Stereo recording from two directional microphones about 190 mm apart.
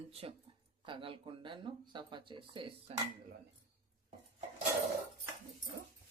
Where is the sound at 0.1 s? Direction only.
30° right (ahead or behind).